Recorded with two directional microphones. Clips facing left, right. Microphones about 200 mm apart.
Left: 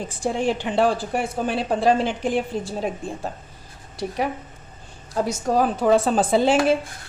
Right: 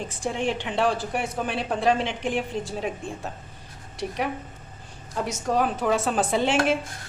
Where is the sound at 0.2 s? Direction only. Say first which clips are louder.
Left 4 dB; 35° left (ahead or behind).